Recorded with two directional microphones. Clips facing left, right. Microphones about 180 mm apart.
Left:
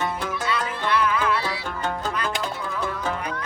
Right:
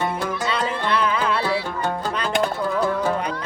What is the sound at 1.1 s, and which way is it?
Music, 30° right (ahead or behind).